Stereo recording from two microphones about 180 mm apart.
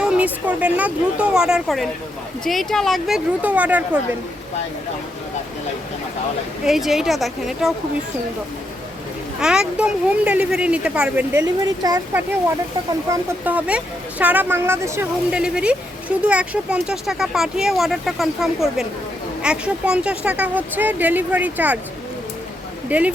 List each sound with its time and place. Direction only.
0.0 s speech: 5° right (ahead or behind)
6.7 s speech: centre (ahead or behind)
9.4 s speech: 5° right (ahead or behind)
11.6 s speech: 20° right (ahead or behind)
13.4 s speech: 10° right (ahead or behind)
22.9 s speech: 10° right (ahead or behind)